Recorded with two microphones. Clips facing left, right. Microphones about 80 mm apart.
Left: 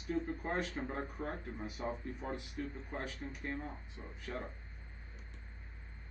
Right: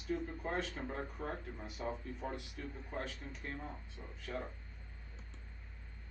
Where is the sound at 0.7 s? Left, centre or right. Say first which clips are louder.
Left 2 dB; centre.